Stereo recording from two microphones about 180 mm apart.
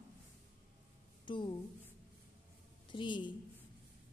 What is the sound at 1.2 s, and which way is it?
Speech, 25° left (ahead or behind).